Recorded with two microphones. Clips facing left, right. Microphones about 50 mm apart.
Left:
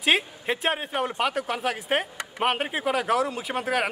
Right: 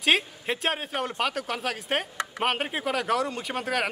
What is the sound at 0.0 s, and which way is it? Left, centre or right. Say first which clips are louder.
Speech: left 1 dB; centre.